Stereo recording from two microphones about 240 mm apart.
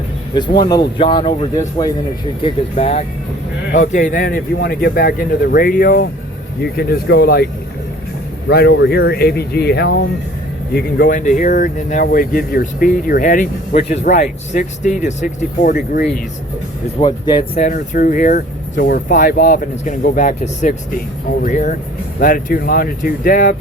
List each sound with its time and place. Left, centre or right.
0.3 s speech: centre; by 16.2 s left
17.0 s speech: centre; by 23.6 s left